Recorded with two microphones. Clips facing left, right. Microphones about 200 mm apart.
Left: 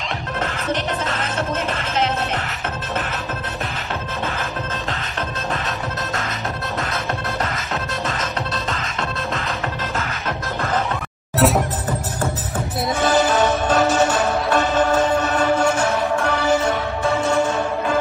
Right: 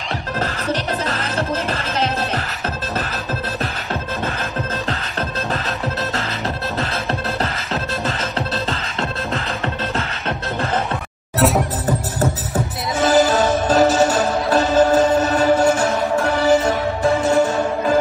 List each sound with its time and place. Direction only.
0.4 s music: 35° right (ahead or behind)
7.7 s music: 35° right (ahead or behind)
11.3 s music: centre (ahead or behind)
13.1 s music: 40° right (ahead or behind)